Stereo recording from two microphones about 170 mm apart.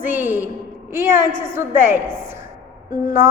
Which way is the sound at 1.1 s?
15° right (ahead or behind).